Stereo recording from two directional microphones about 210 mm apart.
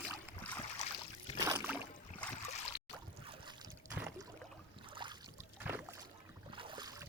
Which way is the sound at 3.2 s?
20° right (ahead or behind).